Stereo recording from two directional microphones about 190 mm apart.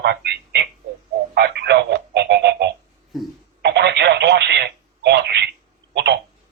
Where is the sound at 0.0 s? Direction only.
60° right (ahead or behind).